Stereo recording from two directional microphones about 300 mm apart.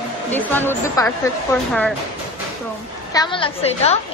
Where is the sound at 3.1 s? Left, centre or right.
Centre.